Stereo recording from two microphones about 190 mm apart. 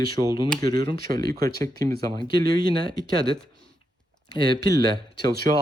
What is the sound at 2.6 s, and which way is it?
Speech, 50° right (ahead or behind).